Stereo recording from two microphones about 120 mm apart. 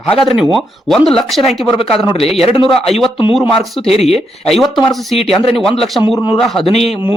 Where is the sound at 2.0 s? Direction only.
40° left (ahead or behind).